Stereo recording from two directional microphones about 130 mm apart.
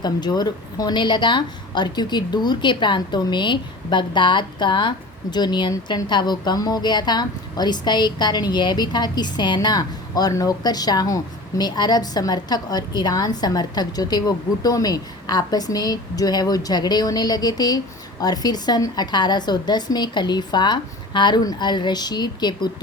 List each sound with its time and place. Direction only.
0.0 s a woman's voice: 30° left (ahead or behind)